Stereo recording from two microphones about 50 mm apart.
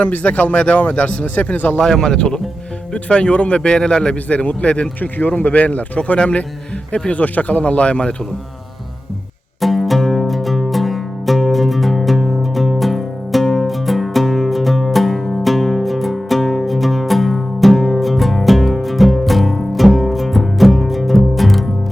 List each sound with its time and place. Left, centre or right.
0.0 s a man's voice: left
1.8 s a man's voice: centre
4.9 s a man's voice: left
9.6 s music: centre